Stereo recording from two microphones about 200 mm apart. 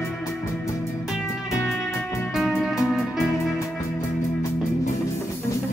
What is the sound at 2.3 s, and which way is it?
Music, centre (ahead or behind).